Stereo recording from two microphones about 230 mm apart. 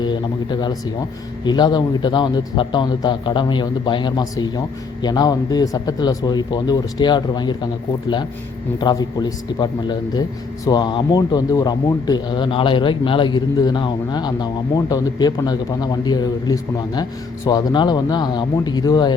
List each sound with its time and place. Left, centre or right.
0.0 s a man's voice: centre